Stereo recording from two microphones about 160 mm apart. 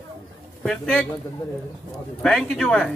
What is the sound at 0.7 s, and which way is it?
Speech, 5° left (ahead or behind).